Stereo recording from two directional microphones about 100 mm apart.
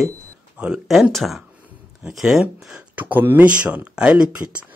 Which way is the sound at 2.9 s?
15° right (ahead or behind).